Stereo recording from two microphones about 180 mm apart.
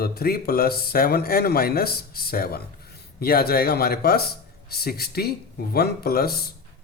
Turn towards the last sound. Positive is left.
turn(degrees=60)  # may be behind; listen again after turning